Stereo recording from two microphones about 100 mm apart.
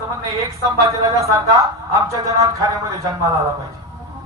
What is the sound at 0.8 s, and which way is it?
Speech, 35° right (ahead or behind).